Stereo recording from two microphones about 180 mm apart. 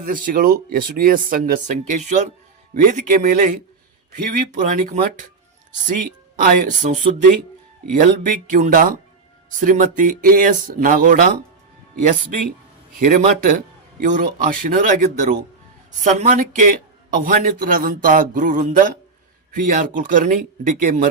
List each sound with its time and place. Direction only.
0.0 s speech: 50° right (ahead or behind)
13.0 s speech: 45° right (ahead or behind)